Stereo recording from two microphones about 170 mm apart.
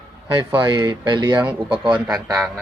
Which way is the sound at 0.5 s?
25° right (ahead or behind).